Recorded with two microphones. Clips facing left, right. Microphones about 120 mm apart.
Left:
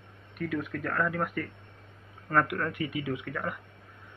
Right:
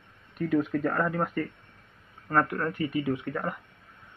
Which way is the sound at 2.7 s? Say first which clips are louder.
Right 4 dB; 35° right (ahead or behind).